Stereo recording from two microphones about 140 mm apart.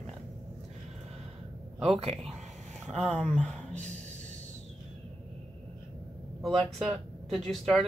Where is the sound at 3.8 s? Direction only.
60° right (ahead or behind).